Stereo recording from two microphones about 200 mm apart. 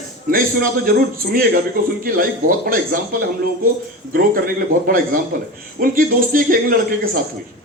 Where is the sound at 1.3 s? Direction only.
50° right (ahead or behind).